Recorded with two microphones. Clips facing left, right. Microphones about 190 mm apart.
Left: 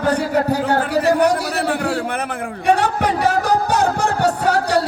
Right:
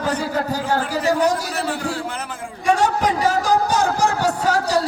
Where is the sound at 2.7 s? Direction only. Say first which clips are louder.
Even; 65° left (ahead or behind).